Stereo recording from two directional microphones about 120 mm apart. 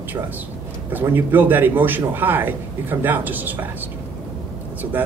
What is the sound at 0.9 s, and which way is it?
A man's voice, 15° right (ahead or behind).